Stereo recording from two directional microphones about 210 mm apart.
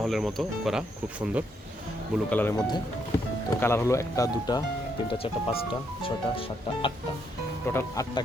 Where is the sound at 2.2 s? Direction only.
10° left (ahead or behind).